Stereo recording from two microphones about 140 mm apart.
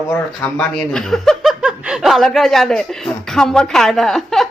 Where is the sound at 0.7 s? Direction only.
5° left (ahead or behind).